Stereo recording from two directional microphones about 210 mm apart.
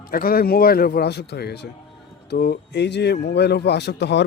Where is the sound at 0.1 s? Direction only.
45° left (ahead or behind).